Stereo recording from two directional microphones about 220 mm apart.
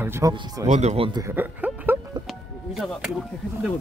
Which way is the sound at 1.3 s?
10° right (ahead or behind).